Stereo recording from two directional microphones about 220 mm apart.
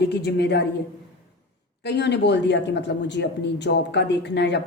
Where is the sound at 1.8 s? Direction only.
50° left (ahead or behind).